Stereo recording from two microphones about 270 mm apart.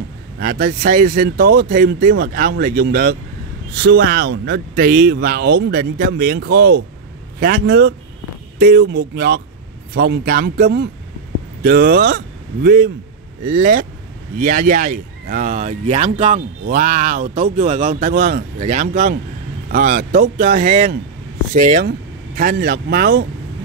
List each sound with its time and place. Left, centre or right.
0.4 s speech: right